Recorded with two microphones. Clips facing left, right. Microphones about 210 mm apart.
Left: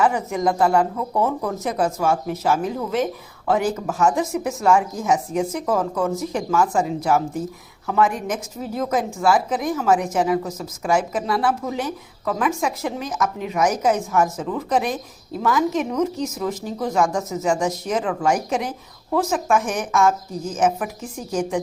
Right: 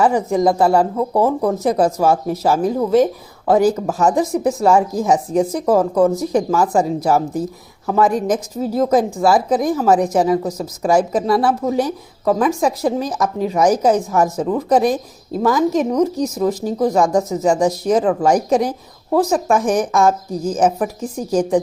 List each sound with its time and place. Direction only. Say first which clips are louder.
0.0 s speech: right 5 dB; 35° right (ahead or behind)